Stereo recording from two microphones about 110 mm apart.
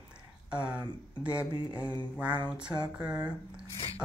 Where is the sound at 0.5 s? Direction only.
10° right (ahead or behind).